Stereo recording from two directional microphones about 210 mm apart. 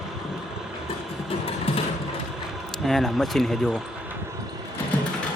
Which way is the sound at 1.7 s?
25° left (ahead or behind).